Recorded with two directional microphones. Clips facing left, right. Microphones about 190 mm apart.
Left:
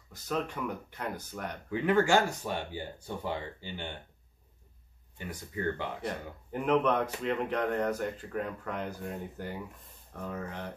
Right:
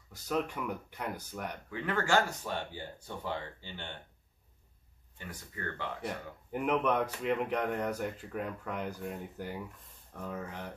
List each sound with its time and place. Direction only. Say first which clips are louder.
0.1 s speech: even; 10° right (ahead or behind)
1.7 s speech: left 6 dB; 15° left (ahead or behind)
5.1 s speech: left 7 dB; 15° left (ahead or behind)
6.0 s speech: left 2 dB; 10° right (ahead or behind)